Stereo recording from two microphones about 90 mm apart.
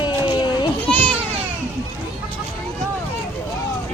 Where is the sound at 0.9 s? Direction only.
5° left (ahead or behind).